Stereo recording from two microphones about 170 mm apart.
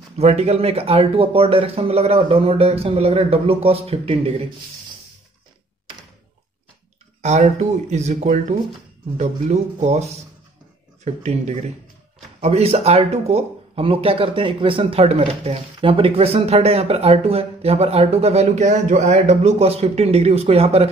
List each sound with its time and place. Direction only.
0.2 s speech: 40° right (ahead or behind)
7.2 s speech: 40° right (ahead or behind)